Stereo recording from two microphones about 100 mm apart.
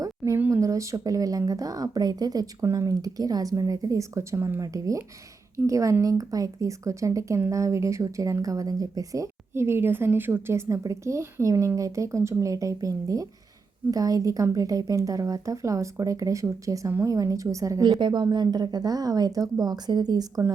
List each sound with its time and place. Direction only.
0.3 s a sound: 20° right (ahead or behind)
0.6 s speech: 30° right (ahead or behind)
18.0 s speech: 45° right (ahead or behind)